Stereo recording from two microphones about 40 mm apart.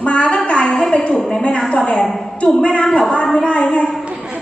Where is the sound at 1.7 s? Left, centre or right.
Left.